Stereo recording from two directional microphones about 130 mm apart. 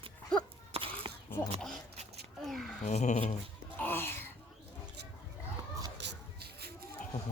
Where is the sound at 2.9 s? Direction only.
65° left (ahead or behind).